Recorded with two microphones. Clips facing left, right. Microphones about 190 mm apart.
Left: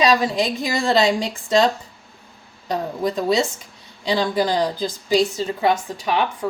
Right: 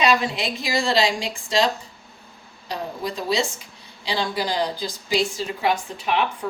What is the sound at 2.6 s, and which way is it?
A woman's voice, 45° left (ahead or behind).